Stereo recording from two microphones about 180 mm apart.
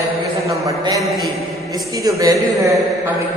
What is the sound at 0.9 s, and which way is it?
Speech, centre (ahead or behind).